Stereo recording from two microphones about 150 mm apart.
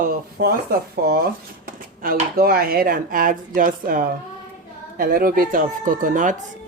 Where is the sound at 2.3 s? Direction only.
85° right.